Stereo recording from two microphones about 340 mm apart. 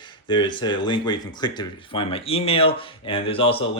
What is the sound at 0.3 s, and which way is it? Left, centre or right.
Speech, centre.